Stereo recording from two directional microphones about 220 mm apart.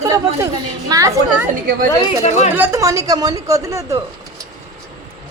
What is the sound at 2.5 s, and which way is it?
A woman's voice, 10° right (ahead or behind).